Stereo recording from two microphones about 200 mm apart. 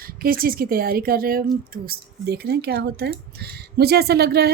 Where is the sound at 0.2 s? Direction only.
45° right (ahead or behind).